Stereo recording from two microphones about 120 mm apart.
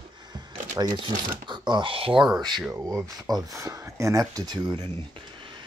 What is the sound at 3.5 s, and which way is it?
Speech, 25° right (ahead or behind).